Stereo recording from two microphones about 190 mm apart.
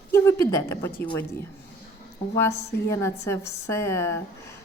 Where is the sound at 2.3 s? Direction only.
15° left (ahead or behind).